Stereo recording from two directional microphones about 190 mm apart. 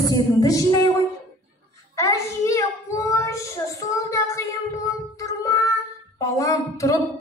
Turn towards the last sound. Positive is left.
turn(degrees=15)  # may be behind; listen again after turning